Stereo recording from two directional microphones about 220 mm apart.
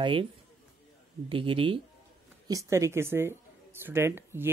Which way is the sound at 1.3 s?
25° right (ahead or behind).